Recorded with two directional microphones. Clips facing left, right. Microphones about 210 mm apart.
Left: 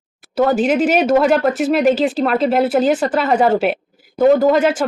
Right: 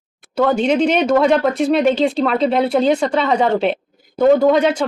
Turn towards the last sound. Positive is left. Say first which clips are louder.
# even
turn(degrees=5)  # may be behind; listen again after turning